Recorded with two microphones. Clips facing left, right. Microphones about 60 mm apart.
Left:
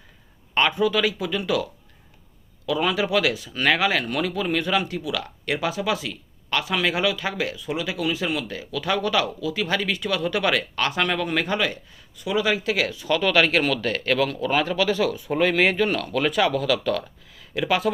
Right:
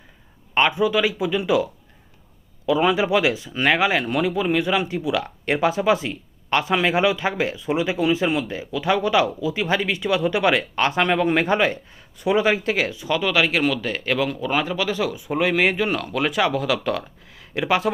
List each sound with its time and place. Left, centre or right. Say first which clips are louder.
0.5 s speech: right 2 dB; centre